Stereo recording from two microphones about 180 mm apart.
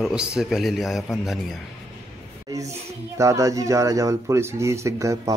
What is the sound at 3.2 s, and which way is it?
Speech, 20° right (ahead or behind).